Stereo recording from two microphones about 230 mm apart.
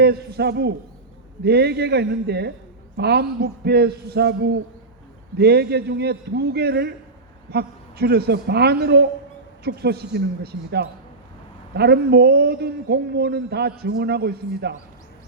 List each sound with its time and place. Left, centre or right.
0.0 s speech: right